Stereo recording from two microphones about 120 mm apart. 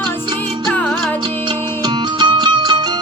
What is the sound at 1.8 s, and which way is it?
Music, 40° right (ahead or behind).